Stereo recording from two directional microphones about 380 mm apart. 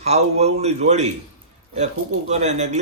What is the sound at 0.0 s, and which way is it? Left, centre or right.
Speech, centre.